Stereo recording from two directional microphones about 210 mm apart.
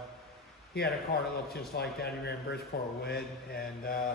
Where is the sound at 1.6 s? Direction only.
50° left (ahead or behind).